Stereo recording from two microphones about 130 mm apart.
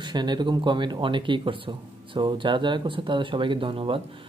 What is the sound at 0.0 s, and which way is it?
Speech, 35° right (ahead or behind).